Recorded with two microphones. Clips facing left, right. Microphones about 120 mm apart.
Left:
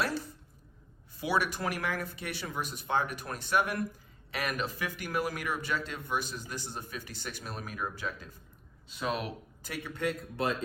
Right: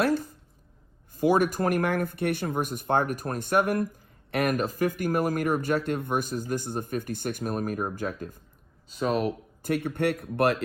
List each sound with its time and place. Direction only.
0.0 s speech: 50° right (ahead or behind)
8.9 s speech: 40° right (ahead or behind); by 10.6 s 70° right (ahead or behind)